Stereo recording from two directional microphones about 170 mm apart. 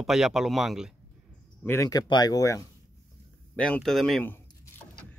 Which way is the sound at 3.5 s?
5° left (ahead or behind).